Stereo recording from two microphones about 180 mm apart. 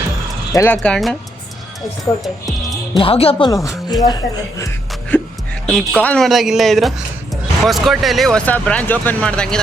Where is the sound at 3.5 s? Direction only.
20° left (ahead or behind).